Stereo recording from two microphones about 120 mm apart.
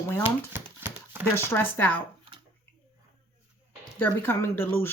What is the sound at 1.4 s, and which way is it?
Speech, 20° left (ahead or behind).